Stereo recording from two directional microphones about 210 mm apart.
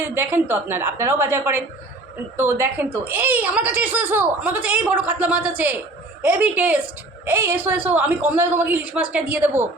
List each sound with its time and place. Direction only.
0.0 s speech: 10° right (ahead or behind)